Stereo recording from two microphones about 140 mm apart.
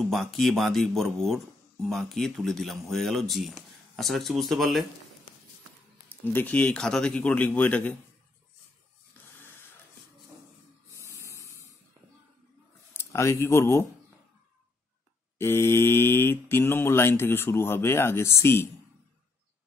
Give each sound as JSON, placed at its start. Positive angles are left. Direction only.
{"t": 0.0, "sound": "speech", "side_deg": 0}
{"t": 6.0, "sound": "speech", "side_deg": 15}
{"t": 12.9, "sound": "speech", "side_deg": 20}
{"t": 15.3, "sound": "speech", "side_deg": 15}